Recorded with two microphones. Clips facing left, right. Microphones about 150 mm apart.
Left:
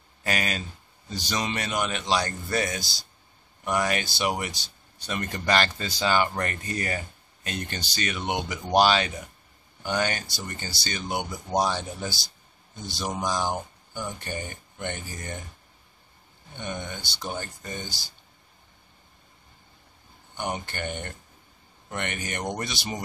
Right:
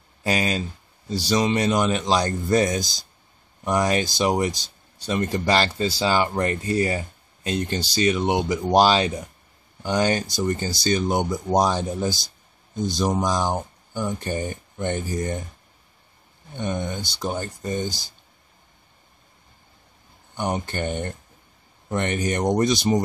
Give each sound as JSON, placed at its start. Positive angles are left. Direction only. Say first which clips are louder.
{"t": 0.2, "sound": "speech", "louder": "right 6 dB", "side_deg": -30}
{"t": 16.5, "sound": "speech", "louder": "right 7 dB", "side_deg": -40}
{"t": 20.3, "sound": "speech", "louder": "right 6 dB", "side_deg": -40}